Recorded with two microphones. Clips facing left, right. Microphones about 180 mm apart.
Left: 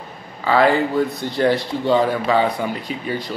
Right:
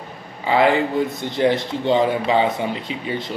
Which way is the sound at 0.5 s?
15° right (ahead or behind).